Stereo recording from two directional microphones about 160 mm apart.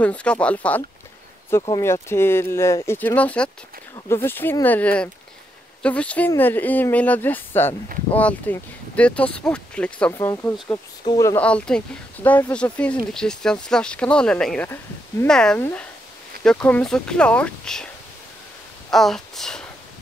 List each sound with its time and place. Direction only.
0.0 s speech: 10° left (ahead or behind)
11.4 s speech: 5° left (ahead or behind)
18.9 s speech: centre (ahead or behind)